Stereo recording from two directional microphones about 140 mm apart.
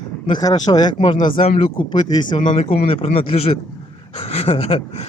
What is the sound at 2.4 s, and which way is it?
Speech, 45° left (ahead or behind).